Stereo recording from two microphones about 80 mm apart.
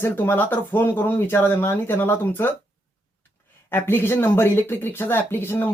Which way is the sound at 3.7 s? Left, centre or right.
Left.